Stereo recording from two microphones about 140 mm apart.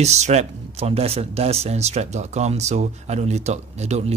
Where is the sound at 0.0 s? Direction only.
50° right (ahead or behind).